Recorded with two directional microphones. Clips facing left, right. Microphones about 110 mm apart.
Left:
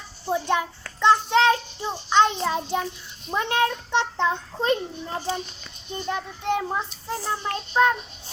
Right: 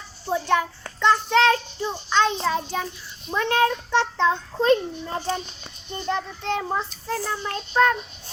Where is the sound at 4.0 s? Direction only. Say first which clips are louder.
Right 2 dB; 15° left (ahead or behind).